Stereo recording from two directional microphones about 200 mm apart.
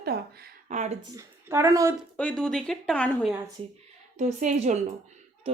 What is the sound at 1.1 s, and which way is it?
Speech, 10° right (ahead or behind).